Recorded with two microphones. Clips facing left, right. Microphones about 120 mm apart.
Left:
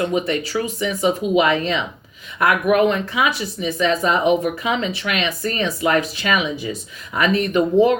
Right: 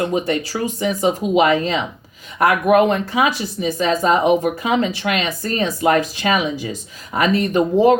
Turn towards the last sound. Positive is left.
turn(degrees=-35)  # may be behind; listen again after turning